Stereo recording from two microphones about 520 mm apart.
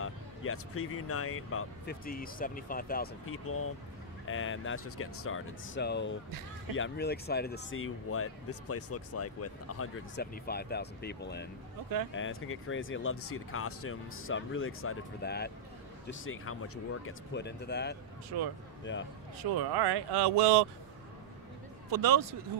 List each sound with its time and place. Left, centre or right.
0.0 s speech: left
19.5 s speech: right
21.9 s speech: right